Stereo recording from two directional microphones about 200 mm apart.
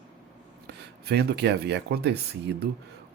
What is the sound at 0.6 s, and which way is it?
Speech, 55° right (ahead or behind).